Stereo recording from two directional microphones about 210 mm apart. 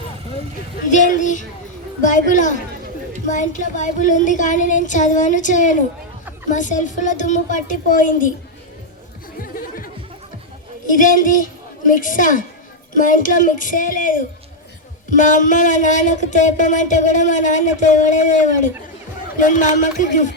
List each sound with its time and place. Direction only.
0.9 s music: 35° left (ahead or behind)
9.4 s music: 40° left (ahead or behind)